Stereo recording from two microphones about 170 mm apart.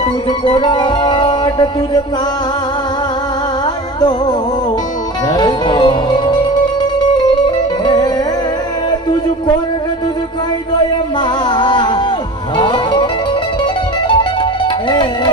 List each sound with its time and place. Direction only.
0.3 s music: 30° left (ahead or behind)
5.3 s music: 25° left (ahead or behind)
7.9 s music: 25° left (ahead or behind)
11.4 s music: 30° left (ahead or behind)
14.8 s music: 30° left (ahead or behind)